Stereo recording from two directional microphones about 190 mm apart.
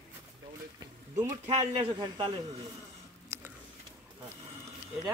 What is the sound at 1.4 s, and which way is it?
Speech, 30° right (ahead or behind).